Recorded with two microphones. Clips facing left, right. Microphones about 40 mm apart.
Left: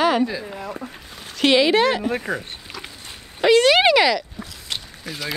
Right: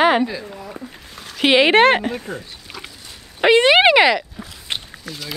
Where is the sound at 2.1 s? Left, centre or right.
Left.